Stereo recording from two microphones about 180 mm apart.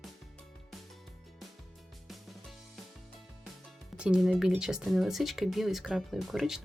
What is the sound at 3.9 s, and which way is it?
Speech, 5° right (ahead or behind).